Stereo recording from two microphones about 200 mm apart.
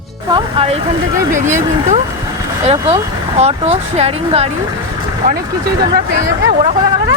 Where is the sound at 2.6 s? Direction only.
30° right (ahead or behind).